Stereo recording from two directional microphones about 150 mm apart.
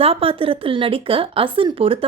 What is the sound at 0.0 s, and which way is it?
Speech, 40° right (ahead or behind).